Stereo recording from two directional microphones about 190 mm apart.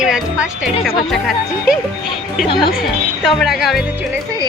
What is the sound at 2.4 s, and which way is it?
Speech, 25° left (ahead or behind).